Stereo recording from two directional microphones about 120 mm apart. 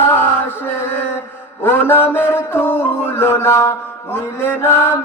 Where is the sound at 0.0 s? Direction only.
20° left (ahead or behind).